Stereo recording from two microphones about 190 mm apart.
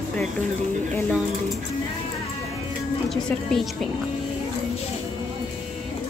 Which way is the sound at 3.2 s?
5° left (ahead or behind).